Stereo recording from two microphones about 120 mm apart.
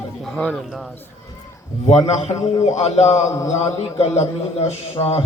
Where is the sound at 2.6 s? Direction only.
65° left (ahead or behind).